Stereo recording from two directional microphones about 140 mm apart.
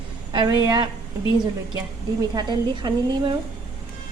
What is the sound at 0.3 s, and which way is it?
Speech, 30° right (ahead or behind).